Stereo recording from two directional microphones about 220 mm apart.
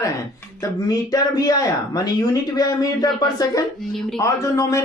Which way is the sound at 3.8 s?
Centre (ahead or behind).